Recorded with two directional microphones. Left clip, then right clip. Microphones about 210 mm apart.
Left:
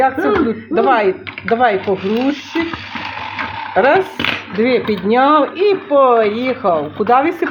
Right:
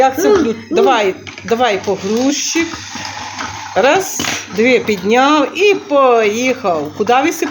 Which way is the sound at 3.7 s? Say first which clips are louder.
Even; 5° left (ahead or behind).